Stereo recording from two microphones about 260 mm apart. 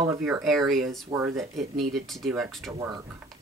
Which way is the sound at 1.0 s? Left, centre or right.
Centre.